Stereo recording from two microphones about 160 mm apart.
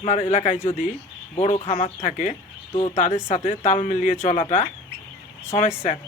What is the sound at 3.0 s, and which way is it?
Speech, 45° left (ahead or behind).